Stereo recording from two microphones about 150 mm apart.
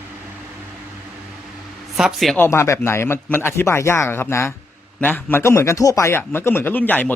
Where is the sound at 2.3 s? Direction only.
15° left (ahead or behind).